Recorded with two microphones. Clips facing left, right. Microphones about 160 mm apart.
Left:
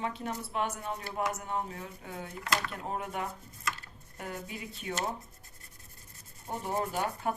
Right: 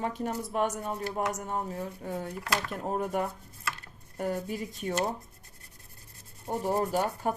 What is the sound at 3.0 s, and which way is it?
Speech, 45° right (ahead or behind).